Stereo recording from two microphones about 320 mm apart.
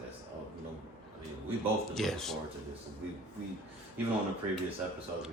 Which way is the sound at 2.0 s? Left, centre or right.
Centre.